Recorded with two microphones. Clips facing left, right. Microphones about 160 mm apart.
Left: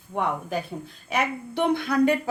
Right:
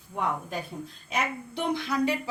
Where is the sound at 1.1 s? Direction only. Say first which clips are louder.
Left 5 dB; 60° left (ahead or behind).